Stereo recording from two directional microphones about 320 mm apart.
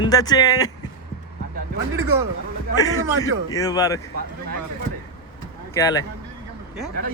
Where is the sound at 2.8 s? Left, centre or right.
Centre.